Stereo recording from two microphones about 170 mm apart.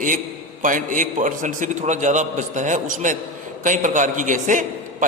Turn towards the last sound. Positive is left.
turn(degrees=-50)  # may be behind; listen again after turning